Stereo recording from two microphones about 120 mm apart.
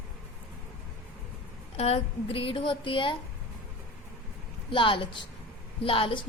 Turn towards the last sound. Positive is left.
turn(degrees=50)  # may be behind; listen again after turning